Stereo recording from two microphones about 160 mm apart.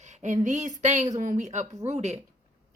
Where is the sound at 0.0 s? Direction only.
45° right (ahead or behind).